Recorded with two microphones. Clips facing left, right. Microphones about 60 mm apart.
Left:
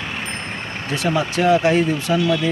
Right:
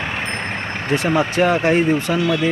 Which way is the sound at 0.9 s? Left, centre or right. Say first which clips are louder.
Right 3 dB; right.